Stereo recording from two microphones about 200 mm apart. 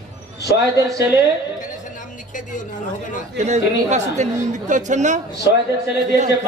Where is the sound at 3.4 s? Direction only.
35° right (ahead or behind).